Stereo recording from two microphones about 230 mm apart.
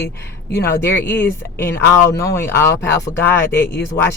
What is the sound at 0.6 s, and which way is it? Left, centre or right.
Speech, centre.